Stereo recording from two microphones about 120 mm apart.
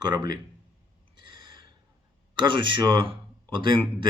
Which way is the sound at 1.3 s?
40° right (ahead or behind).